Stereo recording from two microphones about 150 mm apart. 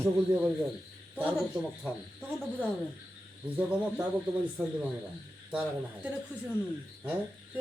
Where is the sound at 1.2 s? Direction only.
15° right (ahead or behind).